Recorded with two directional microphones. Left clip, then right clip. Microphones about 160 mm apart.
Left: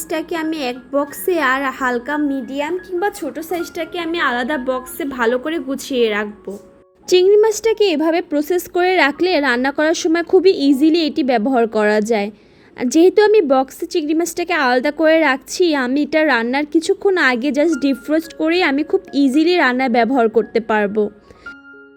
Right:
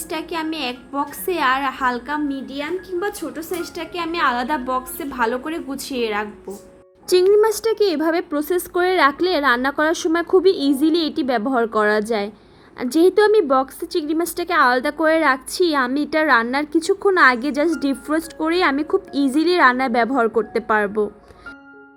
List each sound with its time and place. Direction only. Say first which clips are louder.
0.1 s a woman's voice: left 4 dB; 20° left (ahead or behind)
7.1 s a woman's voice: left 3 dB; 30° left (ahead or behind)